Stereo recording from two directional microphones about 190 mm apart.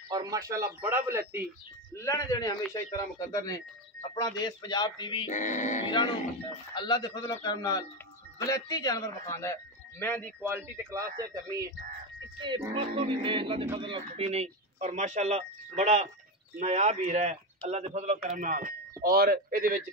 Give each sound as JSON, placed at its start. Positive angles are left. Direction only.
{"t": 0.1, "sound": "speech", "side_deg": -20}
{"t": 2.0, "sound": "a man's voice", "side_deg": 15}
{"t": 5.3, "sound": "speech", "side_deg": 40}
{"t": 5.9, "sound": "a man's voice", "side_deg": 25}
{"t": 10.4, "sound": "a man's voice", "side_deg": -15}